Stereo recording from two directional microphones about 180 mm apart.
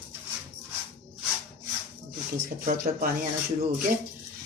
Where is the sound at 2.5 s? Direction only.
50° right (ahead or behind).